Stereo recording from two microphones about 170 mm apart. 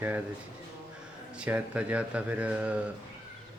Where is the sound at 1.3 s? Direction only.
10° right (ahead or behind).